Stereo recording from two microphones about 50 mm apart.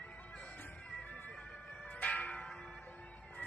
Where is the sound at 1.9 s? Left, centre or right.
Left.